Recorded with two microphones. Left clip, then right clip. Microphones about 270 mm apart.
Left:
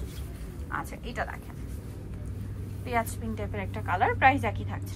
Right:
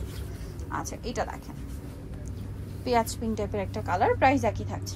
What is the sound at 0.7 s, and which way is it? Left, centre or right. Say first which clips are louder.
Speech: right 1 dB; centre.